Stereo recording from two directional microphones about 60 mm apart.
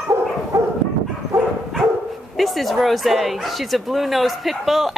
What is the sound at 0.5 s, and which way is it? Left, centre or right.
Dog, right.